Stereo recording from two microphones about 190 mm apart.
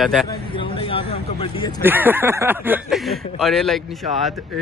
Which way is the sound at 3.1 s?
Centre (ahead or behind).